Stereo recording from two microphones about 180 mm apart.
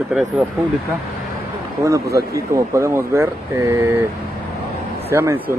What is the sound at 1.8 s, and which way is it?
Speech, 15° right (ahead or behind).